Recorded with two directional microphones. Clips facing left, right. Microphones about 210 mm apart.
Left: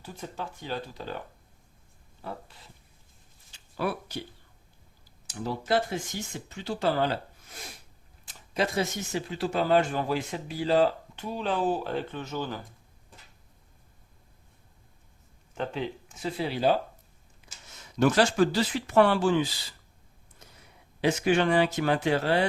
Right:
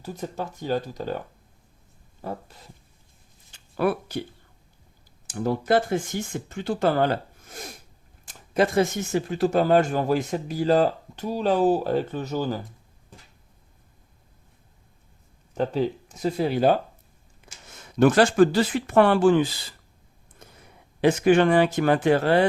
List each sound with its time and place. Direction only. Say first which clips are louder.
0.0 s speech: right 6 dB; 40° right (ahead or behind)
2.2 s speech: right 6 dB; 45° right (ahead or behind)
3.5 s a sound: right 7 dB; 55° right (ahead or behind)
5.2 s speech: right 7 dB; 50° right (ahead or behind)
15.5 s speech: right 8 dB; 40° right (ahead or behind)
20.4 s a sound: right 5 dB; 55° right (ahead or behind)
21.0 s speech: right 6 dB; 50° right (ahead or behind)